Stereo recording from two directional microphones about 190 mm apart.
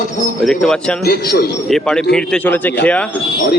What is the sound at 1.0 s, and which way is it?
Speech, 55° left (ahead or behind).